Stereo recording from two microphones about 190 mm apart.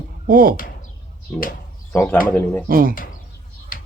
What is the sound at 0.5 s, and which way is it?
Speech, 45° left (ahead or behind).